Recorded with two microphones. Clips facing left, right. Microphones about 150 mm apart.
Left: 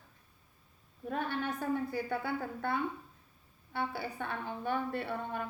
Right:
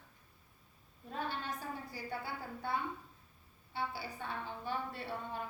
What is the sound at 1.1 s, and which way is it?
A woman's voice, 55° left (ahead or behind).